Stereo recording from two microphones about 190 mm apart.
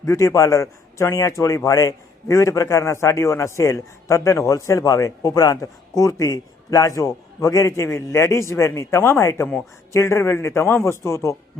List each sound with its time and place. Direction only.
0.0 s speech: 15° left (ahead or behind)